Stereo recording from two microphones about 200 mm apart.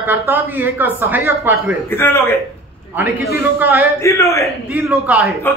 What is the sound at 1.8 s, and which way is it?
Speech, 10° left (ahead or behind).